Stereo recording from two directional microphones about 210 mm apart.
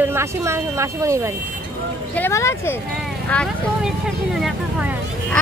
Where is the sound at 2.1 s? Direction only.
10° left (ahead or behind).